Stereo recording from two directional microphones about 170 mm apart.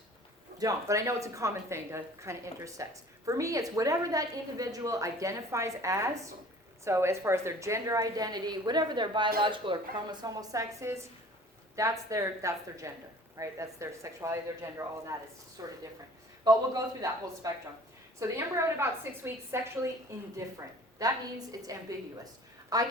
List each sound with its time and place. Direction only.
0.6 s a woman's voice: 20° right (ahead or behind)